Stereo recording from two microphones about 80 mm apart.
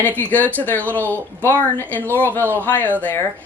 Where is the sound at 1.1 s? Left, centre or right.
Left.